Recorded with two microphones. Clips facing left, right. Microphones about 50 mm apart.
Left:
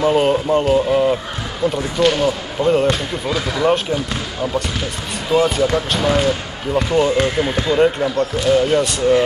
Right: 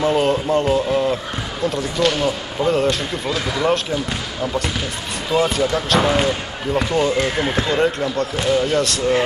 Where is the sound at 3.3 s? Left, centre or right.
Centre.